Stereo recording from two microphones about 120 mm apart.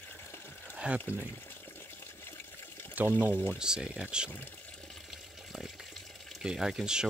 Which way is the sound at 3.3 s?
15° left (ahead or behind).